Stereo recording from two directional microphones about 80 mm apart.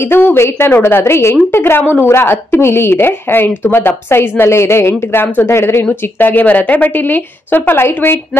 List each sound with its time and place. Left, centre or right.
0.1 s a woman's voice: left